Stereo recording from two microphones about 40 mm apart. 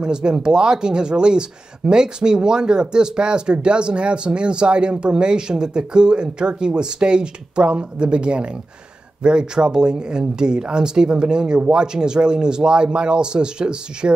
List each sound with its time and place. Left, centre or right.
0.0 s speech: right